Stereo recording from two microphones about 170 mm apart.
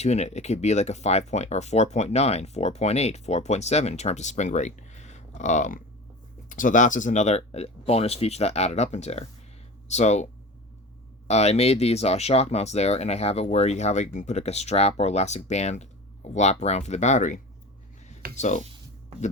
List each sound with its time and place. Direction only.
0.0 s speech: 40° left (ahead or behind)
11.3 s speech: 40° left (ahead or behind)